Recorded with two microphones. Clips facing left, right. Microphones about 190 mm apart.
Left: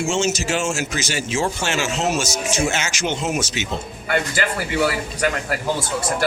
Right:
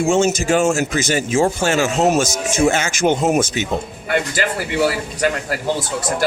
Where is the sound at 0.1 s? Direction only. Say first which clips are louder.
Right 7 dB; 55° right (ahead or behind).